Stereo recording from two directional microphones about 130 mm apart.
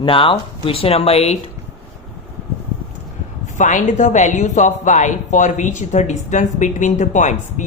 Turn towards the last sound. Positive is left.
turn(degrees=65)  # may be behind; listen again after turning